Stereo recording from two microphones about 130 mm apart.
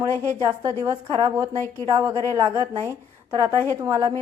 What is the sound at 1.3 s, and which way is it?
A woman's voice, 25° right (ahead or behind).